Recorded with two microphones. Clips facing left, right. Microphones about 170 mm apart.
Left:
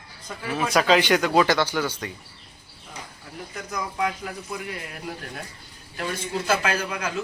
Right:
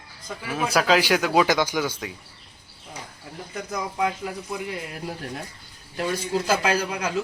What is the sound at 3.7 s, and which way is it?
Speech, 20° right (ahead or behind).